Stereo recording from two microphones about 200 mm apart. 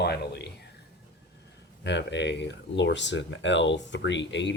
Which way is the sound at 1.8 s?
60° left (ahead or behind).